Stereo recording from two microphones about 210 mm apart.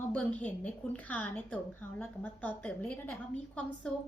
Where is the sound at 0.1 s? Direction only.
5° left (ahead or behind).